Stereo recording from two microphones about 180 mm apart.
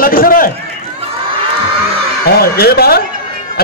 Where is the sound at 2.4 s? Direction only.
60° left (ahead or behind).